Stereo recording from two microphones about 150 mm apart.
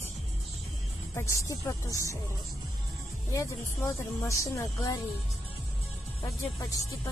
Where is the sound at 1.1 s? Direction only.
20° left (ahead or behind).